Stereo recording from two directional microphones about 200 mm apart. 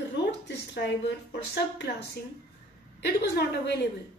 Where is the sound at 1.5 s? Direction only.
55° left (ahead or behind).